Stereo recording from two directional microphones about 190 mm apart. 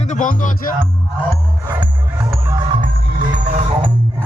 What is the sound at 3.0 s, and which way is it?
Music, 45° right (ahead or behind).